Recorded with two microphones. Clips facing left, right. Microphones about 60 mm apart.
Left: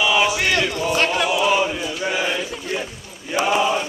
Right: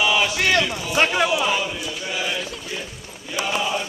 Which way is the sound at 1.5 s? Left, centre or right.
Left.